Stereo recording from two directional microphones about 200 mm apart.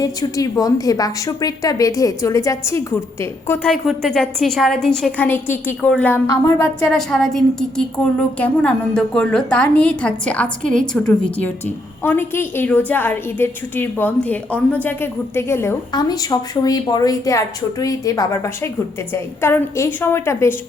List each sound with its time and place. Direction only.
0.0 s a woman's voice: 20° left (ahead or behind)
3.7 s a woman's voice: centre (ahead or behind)